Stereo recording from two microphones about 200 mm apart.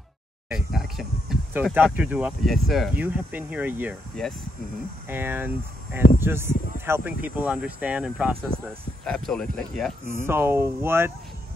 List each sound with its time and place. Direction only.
0.5 s speech: centre (ahead or behind)
4.2 s speech: centre (ahead or behind)
5.0 s speech: 10° right (ahead or behind)
10.1 s speech: 10° right (ahead or behind)